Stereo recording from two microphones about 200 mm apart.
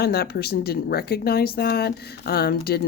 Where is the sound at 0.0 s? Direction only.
50° left (ahead or behind).